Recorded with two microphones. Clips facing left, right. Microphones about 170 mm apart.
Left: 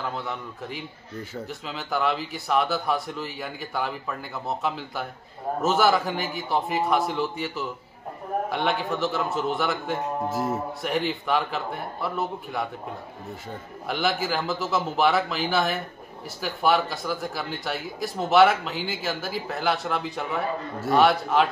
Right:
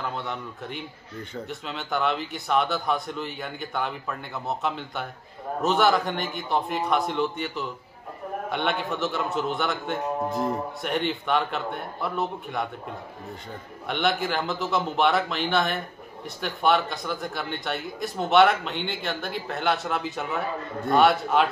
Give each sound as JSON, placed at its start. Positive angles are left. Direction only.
{"t": 0.0, "sound": "speech", "side_deg": 0}
{"t": 13.8, "sound": "speech", "side_deg": 0}